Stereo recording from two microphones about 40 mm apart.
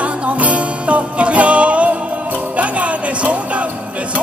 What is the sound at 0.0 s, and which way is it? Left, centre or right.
Music, right.